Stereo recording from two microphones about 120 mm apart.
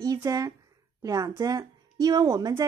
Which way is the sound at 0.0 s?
30° right (ahead or behind).